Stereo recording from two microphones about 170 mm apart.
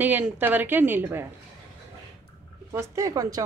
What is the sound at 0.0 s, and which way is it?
A woman's voice, 10° right (ahead or behind).